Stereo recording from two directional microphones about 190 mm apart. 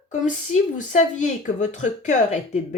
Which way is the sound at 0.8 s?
40° left (ahead or behind).